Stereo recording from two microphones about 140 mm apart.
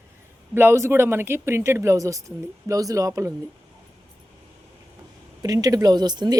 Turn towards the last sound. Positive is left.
turn(degrees=-30)  # may be behind; listen again after turning